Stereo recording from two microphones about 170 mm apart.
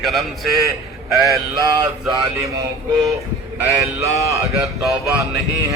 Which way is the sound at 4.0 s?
20° right (ahead or behind).